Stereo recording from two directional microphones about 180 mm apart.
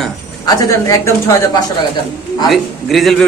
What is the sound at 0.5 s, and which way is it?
Speech, 20° left (ahead or behind).